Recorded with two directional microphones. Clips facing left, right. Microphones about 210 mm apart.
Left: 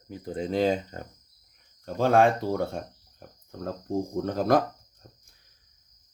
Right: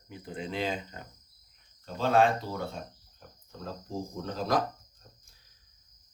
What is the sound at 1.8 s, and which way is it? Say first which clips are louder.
Speech: left 4 dB; 55° left (ahead or behind).